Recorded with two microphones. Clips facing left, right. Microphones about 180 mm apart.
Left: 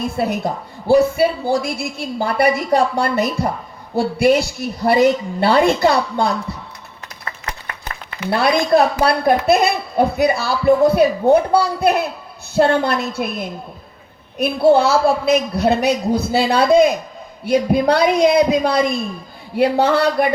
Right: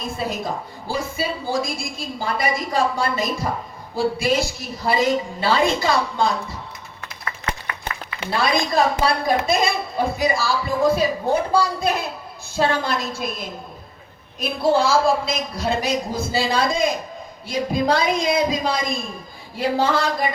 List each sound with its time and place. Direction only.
0.0 s a man's voice: 65° left (ahead or behind)
7.4 s a sound: 25° right (ahead or behind)
8.3 s a man's voice: 65° left (ahead or behind)
14.3 s a man's voice: 65° left (ahead or behind)